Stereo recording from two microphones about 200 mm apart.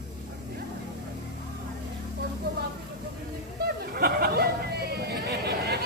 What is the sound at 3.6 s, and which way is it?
Chatter, 50° right (ahead or behind).